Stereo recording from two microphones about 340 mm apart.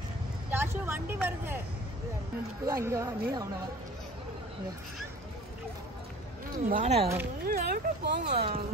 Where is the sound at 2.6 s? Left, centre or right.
Centre.